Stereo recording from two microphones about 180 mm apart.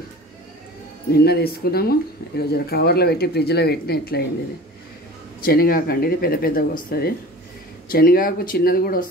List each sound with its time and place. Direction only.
1.1 s speech: 65° left (ahead or behind)
5.4 s speech: 55° left (ahead or behind)